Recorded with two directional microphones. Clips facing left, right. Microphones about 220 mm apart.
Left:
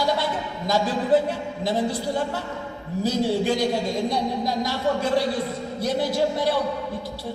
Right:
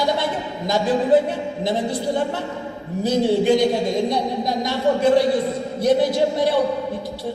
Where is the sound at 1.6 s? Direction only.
20° right (ahead or behind).